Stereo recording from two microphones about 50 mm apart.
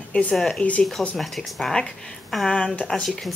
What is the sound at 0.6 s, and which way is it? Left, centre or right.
Speech, left.